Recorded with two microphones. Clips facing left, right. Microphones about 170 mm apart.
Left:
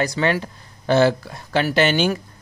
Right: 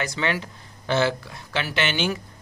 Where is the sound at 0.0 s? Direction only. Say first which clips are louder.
Left 6 dB; 40° left (ahead or behind).